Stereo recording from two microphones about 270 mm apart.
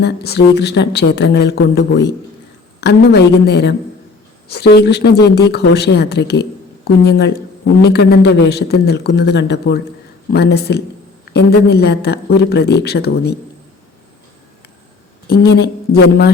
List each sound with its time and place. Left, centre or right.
0.0 s speech: left
15.3 s speech: left